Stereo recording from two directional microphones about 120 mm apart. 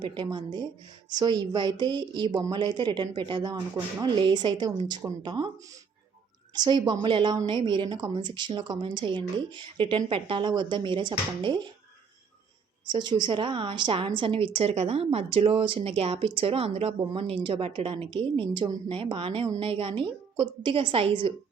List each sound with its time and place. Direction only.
0.0 s a woman's voice: 40° right (ahead or behind)
6.5 s a woman's voice: 35° right (ahead or behind)
12.8 s a woman's voice: 40° right (ahead or behind)